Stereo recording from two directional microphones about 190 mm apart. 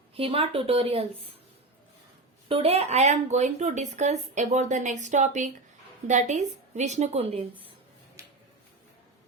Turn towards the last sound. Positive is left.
turn(degrees=-30)  # may be behind; listen again after turning